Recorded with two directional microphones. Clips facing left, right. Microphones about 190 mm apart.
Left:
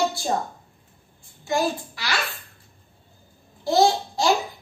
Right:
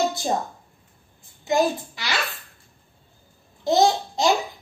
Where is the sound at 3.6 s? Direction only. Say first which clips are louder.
Even; 20° right (ahead or behind).